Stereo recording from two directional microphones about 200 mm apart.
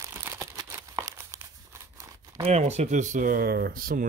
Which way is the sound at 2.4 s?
35° right (ahead or behind).